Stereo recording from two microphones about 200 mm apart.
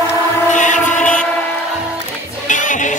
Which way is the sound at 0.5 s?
40° left (ahead or behind).